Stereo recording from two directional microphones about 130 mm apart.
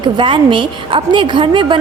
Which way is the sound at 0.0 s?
40° right (ahead or behind).